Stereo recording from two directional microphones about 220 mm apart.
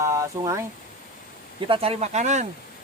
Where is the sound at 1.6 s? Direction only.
25° right (ahead or behind).